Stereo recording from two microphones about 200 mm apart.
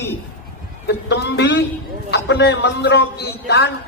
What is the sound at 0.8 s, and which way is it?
A man's voice, 60° left (ahead or behind).